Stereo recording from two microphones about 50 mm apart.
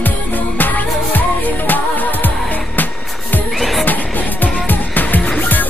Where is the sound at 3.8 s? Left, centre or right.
Left.